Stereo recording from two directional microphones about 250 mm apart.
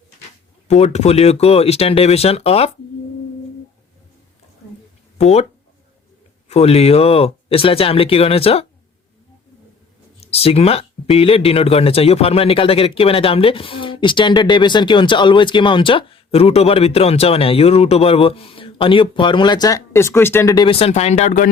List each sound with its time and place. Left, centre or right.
0.7 s speech: left
5.1 s speech: left
6.5 s speech: left
10.2 s speech: left